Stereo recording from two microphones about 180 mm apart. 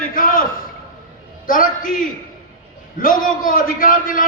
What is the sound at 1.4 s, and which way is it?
A man's voice, 50° left (ahead or behind).